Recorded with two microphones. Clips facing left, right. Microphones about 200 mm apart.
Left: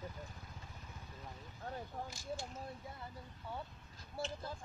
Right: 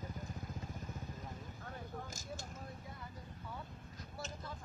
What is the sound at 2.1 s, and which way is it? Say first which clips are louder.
Speech: left 3 dB; 45° right (ahead or behind).